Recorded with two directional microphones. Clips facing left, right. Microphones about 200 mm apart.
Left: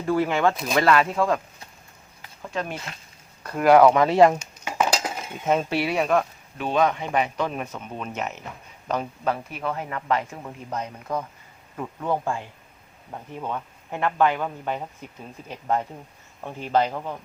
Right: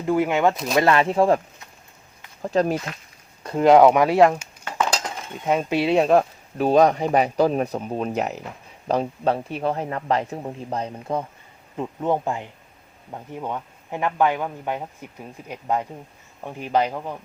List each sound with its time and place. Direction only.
0.0 s speech: 15° right (ahead or behind)
0.5 s speech: centre (ahead or behind)
0.8 s speech: 25° right (ahead or behind)
2.4 s speech: 40° right (ahead or behind)
3.4 s speech: 20° right (ahead or behind); by 4.4 s 5° right (ahead or behind)
4.6 s cutlery: 10° left (ahead or behind)
5.5 s speech: 15° right (ahead or behind)